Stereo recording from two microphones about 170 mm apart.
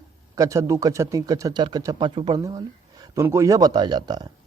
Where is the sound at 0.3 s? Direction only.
20° right (ahead or behind).